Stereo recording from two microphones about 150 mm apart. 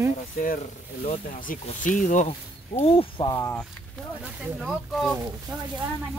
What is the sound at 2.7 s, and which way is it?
Speech, 40° left (ahead or behind).